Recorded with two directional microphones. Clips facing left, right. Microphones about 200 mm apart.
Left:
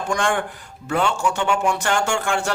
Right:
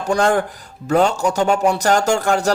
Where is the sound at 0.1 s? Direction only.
40° right (ahead or behind).